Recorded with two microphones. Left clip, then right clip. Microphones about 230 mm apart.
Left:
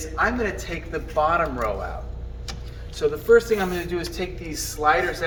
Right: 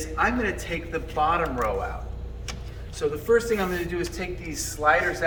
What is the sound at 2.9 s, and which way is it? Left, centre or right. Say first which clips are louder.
A man's voice: left 5 dB; centre.